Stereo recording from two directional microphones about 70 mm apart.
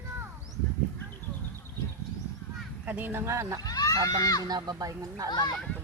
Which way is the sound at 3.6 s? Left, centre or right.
Left.